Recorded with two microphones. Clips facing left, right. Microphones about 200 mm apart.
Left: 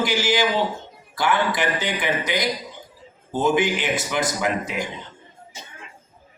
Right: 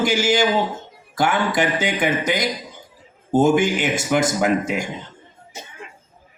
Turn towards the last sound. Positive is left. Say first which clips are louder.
# right 5 dB
turn(degrees=-45)  # may be behind; listen again after turning